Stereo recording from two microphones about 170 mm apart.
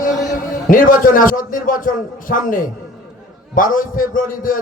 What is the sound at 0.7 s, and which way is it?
A man's voice, 55° left (ahead or behind).